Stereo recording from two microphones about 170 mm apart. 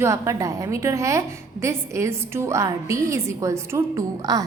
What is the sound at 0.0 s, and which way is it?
A woman's voice, 15° right (ahead or behind).